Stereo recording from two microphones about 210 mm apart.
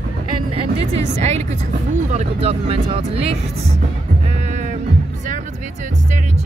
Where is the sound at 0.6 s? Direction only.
30° right (ahead or behind).